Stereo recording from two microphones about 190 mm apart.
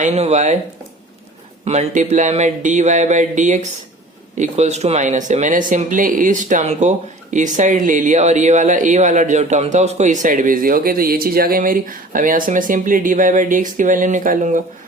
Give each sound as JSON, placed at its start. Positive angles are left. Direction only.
{"t": 0.0, "sound": "speech", "side_deg": -35}
{"t": 1.6, "sound": "speech", "side_deg": -35}